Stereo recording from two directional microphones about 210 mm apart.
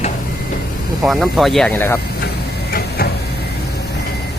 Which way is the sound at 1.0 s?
Centre (ahead or behind).